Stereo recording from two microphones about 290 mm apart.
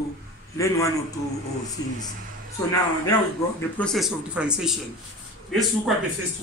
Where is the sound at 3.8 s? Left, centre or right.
Centre.